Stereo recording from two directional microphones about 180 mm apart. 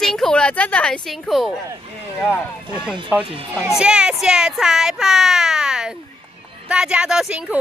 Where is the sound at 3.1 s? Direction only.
10° right (ahead or behind).